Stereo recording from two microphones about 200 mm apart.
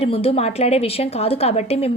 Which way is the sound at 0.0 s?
30° left (ahead or behind).